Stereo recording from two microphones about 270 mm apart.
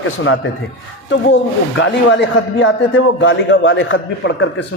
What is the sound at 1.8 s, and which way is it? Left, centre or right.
A man's voice, left.